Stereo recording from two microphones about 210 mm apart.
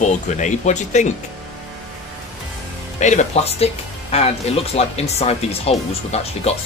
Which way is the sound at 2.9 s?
35° left (ahead or behind).